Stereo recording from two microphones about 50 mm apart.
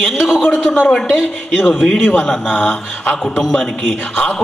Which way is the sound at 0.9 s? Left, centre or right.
Centre.